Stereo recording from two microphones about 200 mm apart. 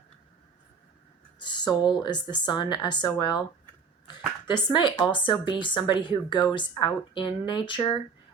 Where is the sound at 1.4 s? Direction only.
20° left (ahead or behind).